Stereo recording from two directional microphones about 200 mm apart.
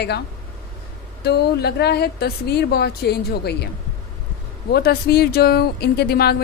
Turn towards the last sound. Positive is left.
turn(degrees=50)  # may be behind; listen again after turning